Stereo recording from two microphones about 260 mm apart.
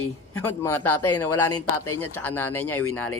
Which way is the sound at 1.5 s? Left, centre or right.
Left.